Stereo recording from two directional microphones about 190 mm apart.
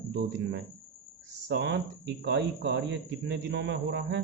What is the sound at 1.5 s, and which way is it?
Speech, 65° right (ahead or behind).